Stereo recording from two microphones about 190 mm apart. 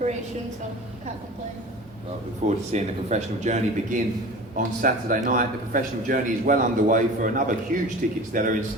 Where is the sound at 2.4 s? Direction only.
40° right (ahead or behind).